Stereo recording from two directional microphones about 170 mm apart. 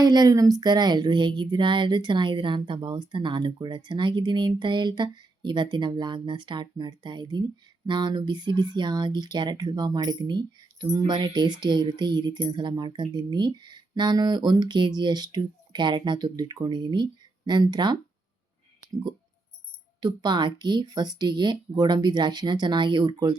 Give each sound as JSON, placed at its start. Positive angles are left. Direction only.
{"t": 0.0, "sound": "speech", "side_deg": -25}
{"t": 20.0, "sound": "speech", "side_deg": -25}